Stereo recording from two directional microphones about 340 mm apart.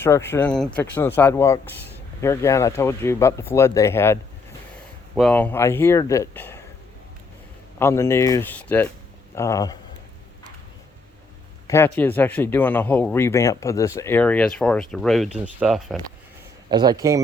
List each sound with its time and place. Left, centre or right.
0.0 s speech: centre
7.8 s speech: centre
11.7 s speech: centre
16.6 s speech: centre